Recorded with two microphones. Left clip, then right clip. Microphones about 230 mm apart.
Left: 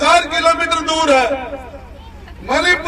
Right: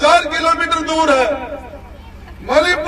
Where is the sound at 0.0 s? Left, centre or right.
Left.